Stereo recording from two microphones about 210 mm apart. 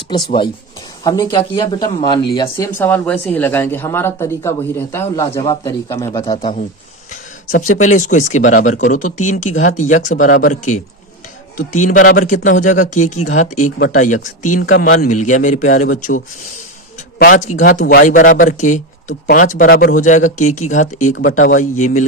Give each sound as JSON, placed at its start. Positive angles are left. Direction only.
{"t": 1.0, "sound": "speech", "side_deg": 15}
{"t": 7.1, "sound": "speech", "side_deg": 35}